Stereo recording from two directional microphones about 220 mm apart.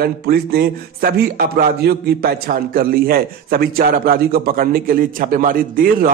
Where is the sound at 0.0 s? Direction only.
45° right (ahead or behind).